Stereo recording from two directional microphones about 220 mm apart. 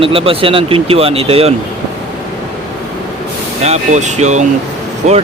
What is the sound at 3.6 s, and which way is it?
Speech, 30° right (ahead or behind).